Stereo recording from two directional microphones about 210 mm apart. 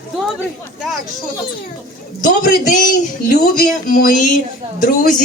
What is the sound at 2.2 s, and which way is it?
A man's voice, 40° left (ahead or behind).